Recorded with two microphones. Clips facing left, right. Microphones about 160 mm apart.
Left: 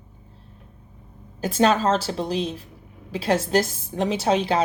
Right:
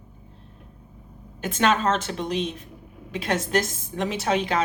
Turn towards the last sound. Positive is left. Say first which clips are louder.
# left 3 dB
turn(degrees=30)  # may be behind; listen again after turning